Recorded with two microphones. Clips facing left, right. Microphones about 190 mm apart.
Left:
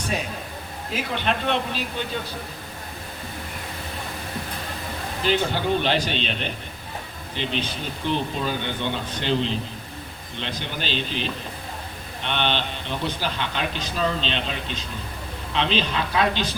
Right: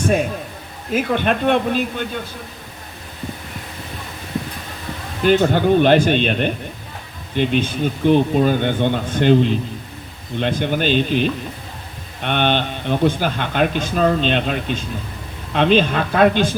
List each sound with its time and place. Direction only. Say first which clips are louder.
0.0 s a man's voice: right 10 dB; 50° right (ahead or behind)
5.2 s speech: right 9 dB; 50° right (ahead or behind)